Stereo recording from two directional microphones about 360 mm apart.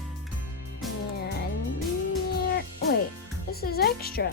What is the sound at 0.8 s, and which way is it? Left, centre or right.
Music, centre.